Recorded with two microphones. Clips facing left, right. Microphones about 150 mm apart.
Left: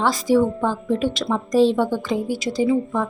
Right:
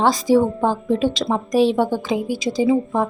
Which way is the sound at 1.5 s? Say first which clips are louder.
Left 1 dB; 70° right (ahead or behind).